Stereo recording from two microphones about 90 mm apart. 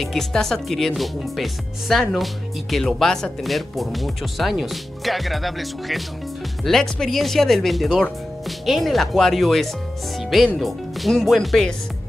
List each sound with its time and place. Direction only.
0.0 s speech: 5° left (ahead or behind)